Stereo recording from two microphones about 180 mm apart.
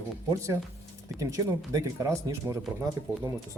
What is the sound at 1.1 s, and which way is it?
Speech, 15° right (ahead or behind).